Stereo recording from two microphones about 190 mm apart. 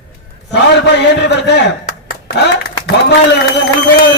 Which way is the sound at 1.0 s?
65° left (ahead or behind).